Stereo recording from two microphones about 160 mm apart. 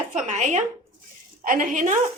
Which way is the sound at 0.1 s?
50° right (ahead or behind).